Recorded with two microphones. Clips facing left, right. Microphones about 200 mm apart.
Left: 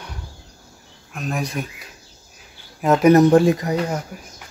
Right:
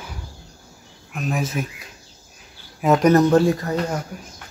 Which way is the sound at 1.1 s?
Centre (ahead or behind).